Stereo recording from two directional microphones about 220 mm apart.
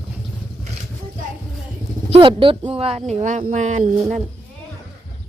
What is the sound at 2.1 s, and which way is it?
Speech, 25° right (ahead or behind).